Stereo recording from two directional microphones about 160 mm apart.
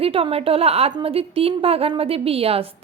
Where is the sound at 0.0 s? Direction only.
35° right (ahead or behind).